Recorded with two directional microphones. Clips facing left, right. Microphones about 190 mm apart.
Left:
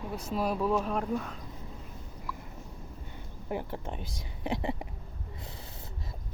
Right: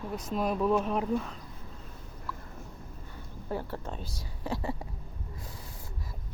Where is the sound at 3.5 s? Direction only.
15° left (ahead or behind).